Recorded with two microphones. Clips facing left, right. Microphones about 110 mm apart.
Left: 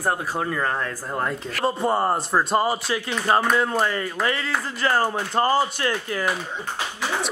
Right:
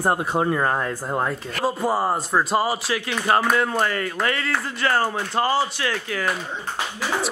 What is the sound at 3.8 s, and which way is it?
Speech, 15° left (ahead or behind).